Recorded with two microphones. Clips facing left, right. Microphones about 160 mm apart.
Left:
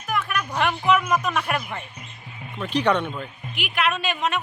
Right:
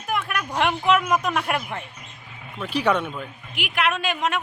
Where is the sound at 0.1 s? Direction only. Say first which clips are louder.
Even; 15° right (ahead or behind).